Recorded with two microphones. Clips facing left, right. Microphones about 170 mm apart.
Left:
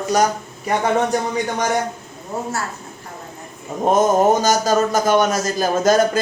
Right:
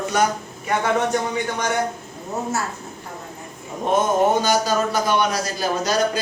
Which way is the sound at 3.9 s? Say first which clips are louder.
Left 4 dB; 40° left (ahead or behind).